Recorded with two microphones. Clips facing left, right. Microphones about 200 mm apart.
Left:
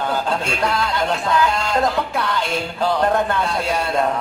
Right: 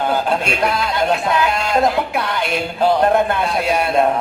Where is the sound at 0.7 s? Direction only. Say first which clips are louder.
Right 3 dB; 20° right (ahead or behind).